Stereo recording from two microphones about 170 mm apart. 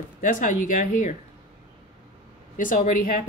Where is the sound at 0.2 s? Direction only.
50° left (ahead or behind).